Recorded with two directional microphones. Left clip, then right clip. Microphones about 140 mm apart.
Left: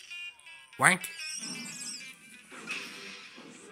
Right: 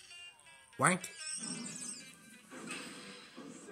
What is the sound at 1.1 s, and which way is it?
Music, 40° right (ahead or behind).